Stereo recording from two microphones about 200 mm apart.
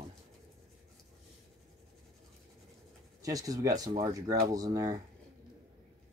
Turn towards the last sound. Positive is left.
turn(degrees=-15)  # may be behind; listen again after turning